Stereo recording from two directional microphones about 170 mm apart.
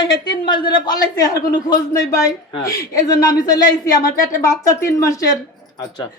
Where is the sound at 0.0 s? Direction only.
25° left (ahead or behind).